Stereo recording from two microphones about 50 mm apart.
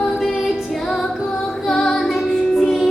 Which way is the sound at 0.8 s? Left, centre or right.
Centre.